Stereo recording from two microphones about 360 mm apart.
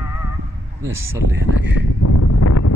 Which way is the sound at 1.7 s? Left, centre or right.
Left.